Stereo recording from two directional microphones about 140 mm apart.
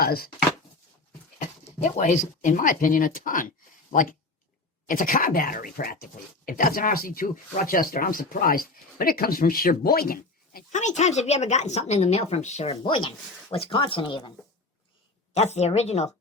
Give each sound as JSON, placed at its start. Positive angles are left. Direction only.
{"t": 0.0, "sound": "speech", "side_deg": 90}
{"t": 1.4, "sound": "speech", "side_deg": 60}
{"t": 4.9, "sound": "speech", "side_deg": 80}
{"t": 12.8, "sound": "speech", "side_deg": 35}
{"t": 15.5, "sound": "speech", "side_deg": 50}